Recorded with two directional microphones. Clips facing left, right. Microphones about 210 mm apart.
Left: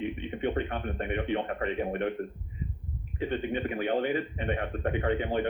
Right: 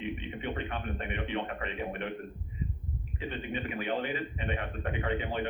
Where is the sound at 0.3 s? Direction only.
50° left (ahead or behind).